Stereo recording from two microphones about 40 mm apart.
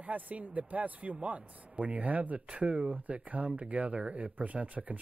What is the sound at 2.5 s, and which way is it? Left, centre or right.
Speech, right.